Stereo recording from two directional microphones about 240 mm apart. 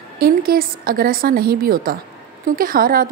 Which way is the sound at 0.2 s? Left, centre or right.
Right.